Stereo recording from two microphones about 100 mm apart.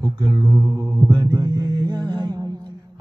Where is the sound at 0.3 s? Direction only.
40° right (ahead or behind).